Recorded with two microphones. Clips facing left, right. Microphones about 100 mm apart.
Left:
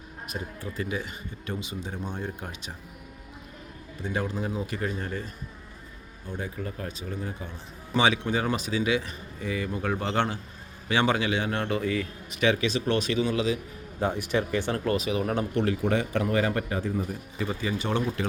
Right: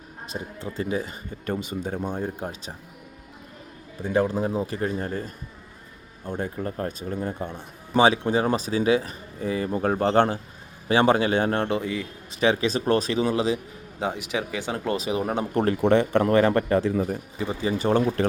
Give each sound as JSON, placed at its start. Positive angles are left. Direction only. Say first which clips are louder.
{"t": 0.3, "sound": "speech", "louder": "right 3 dB", "side_deg": -30}
{"t": 4.1, "sound": "speech", "louder": "right 8 dB", "side_deg": -35}
{"t": 6.2, "sound": "speech", "louder": "right 5 dB", "side_deg": -50}
{"t": 7.9, "sound": "speech", "louder": "right 5 dB", "side_deg": -35}
{"t": 11.8, "sound": "speech", "louder": "left 1 dB", "side_deg": -25}
{"t": 14.0, "sound": "speech", "louder": "left 1 dB", "side_deg": -15}
{"t": 14.9, "sound": "speech", "louder": "right 1 dB", "side_deg": -35}
{"t": 15.5, "sound": "speech", "louder": "right 5 dB", "side_deg": -45}
{"t": 15.8, "sound": "speech", "louder": "right 7 dB", "side_deg": -55}
{"t": 17.4, "sound": "speech", "louder": "right 5 dB", "side_deg": -30}